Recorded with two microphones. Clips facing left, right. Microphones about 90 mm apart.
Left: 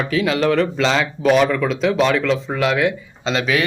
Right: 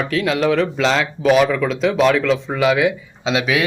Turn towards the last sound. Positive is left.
turn(degrees=-5)  # may be behind; listen again after turning